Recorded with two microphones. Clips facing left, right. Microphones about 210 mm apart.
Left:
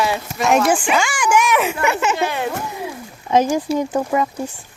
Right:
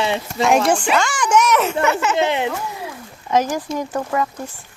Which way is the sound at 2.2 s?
20° right (ahead or behind).